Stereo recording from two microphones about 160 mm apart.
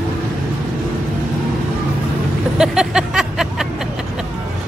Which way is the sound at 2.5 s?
5° right (ahead or behind).